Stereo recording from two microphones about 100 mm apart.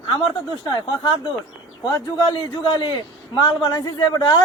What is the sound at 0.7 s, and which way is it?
Speech, 40° left (ahead or behind).